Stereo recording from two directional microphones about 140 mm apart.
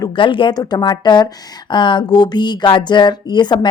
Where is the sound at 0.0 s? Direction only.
35° left (ahead or behind).